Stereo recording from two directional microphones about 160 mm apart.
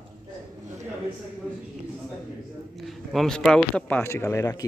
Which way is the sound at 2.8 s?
Centre (ahead or behind).